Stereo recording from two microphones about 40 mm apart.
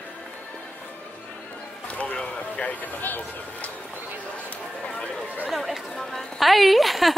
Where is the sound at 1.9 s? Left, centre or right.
Left.